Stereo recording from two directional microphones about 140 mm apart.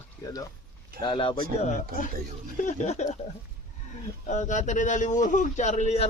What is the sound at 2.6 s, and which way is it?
Speech, 55° left (ahead or behind).